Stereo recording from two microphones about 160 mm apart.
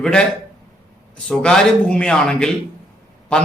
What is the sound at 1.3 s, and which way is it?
A man's voice, 5° left (ahead or behind).